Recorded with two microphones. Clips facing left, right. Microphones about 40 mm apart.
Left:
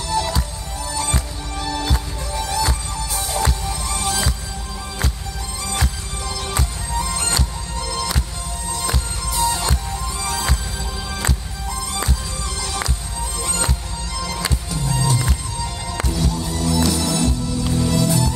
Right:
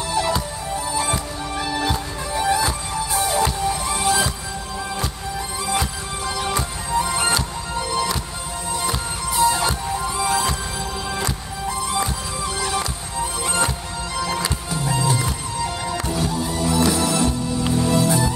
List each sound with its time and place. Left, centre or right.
0.1 s music: centre
5.7 s music: centre
13.2 s music: centre